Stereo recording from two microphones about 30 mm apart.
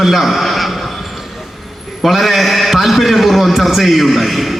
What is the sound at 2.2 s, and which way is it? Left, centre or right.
A man's voice, centre.